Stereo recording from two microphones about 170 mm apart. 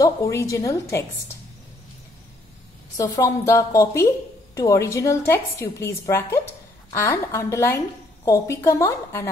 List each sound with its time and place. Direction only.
0.0 s a woman's voice: 15° left (ahead or behind)
3.0 s a woman's voice: 20° left (ahead or behind)